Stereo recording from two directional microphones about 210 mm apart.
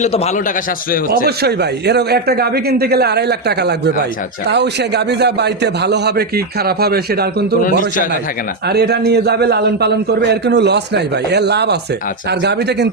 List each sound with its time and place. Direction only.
0.0 s a man's voice: 30° left (ahead or behind)
1.4 s a man's voice: 50° right (ahead or behind)
7.6 s a man's voice: 40° left (ahead or behind)
8.6 s a man's voice: 50° right (ahead or behind)